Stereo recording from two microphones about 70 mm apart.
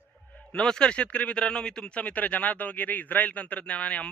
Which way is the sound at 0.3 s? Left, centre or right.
Centre.